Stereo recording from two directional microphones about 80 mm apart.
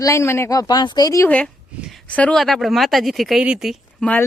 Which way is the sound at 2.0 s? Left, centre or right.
Centre.